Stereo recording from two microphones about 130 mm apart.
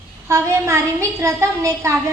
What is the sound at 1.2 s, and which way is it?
Speech, 25° right (ahead or behind).